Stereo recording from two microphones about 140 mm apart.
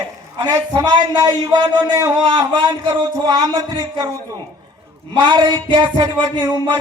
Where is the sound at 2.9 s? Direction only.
25° right (ahead or behind).